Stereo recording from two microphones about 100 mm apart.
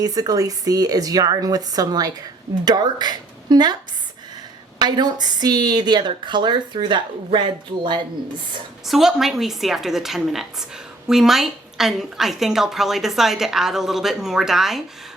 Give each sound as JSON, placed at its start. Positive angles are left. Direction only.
{"t": 0.0, "sound": "a woman's voice", "side_deg": -40}
{"t": 4.8, "sound": "a woman's voice", "side_deg": -45}
{"t": 8.9, "sound": "a woman's voice", "side_deg": -5}